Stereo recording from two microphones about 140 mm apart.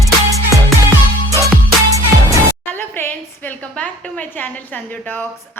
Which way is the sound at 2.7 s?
15° left (ahead or behind).